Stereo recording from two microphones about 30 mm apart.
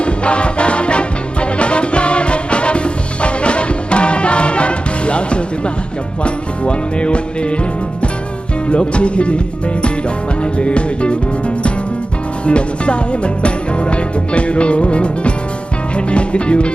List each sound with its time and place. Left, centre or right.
0.0 s music: left
8.6 s music: left
10.4 s music: left